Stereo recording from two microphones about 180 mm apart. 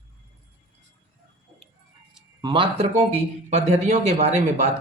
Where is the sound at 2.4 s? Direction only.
30° right (ahead or behind).